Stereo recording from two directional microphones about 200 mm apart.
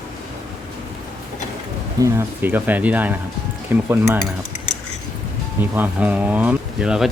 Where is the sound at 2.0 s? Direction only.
10° right (ahead or behind).